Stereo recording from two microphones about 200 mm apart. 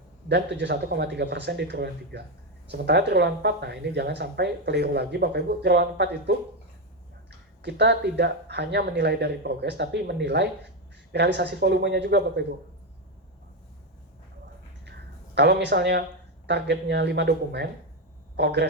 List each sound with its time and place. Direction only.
0.3 s speech: 60° right (ahead or behind)
14.8 s a sound: 60° right (ahead or behind)
16.5 s speech: 60° right (ahead or behind)